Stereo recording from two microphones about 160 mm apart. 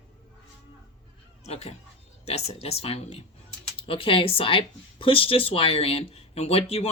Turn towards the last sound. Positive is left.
turn(degrees=35)  # may be behind; listen again after turning